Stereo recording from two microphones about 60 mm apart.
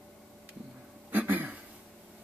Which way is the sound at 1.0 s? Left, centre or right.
Right.